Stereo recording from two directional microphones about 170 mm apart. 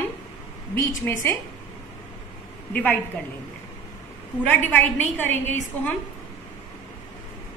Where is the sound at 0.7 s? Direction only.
15° left (ahead or behind).